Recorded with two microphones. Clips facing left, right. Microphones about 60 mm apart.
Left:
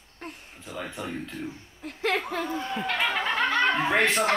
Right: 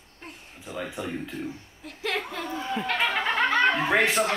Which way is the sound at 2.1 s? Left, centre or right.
Centre.